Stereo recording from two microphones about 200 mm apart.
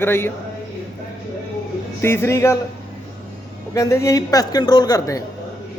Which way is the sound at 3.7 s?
15° left (ahead or behind).